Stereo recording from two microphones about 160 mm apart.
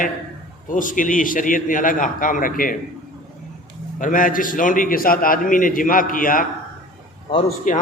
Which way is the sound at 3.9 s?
55° left (ahead or behind).